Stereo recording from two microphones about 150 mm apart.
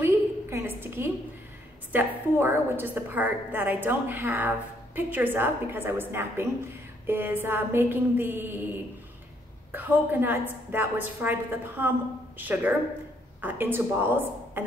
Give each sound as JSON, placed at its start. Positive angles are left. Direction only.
{"t": 0.0, "sound": "a sound", "side_deg": -15}
{"t": 1.9, "sound": "a woman's voice", "side_deg": -15}
{"t": 9.7, "sound": "a woman's voice", "side_deg": -10}